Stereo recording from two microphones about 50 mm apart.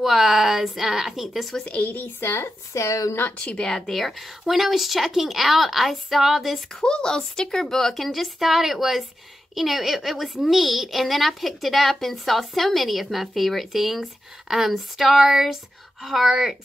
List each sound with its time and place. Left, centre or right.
0.0 s a woman's voice: centre
1.7 s speech: left
2.0 s speech: left
2.7 s a woman's voice: left
3.5 s a woman's voice: centre
6.7 s a woman's voice: centre